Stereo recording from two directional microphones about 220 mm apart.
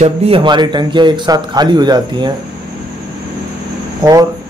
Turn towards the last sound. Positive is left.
turn(degrees=-20)  # may be behind; listen again after turning